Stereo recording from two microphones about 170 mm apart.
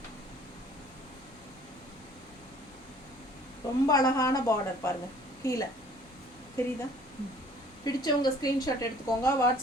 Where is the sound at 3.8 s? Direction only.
20° left (ahead or behind).